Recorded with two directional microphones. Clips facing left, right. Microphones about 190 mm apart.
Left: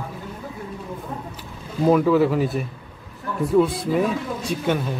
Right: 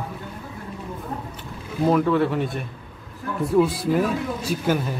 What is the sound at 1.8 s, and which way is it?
Speech, 5° left (ahead or behind).